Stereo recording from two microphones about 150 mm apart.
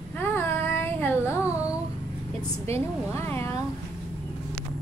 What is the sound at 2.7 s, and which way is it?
Speech, 15° left (ahead or behind).